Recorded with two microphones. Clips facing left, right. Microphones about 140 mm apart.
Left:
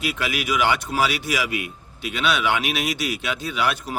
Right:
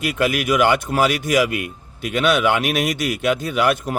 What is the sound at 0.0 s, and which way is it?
Speech, 50° right (ahead or behind).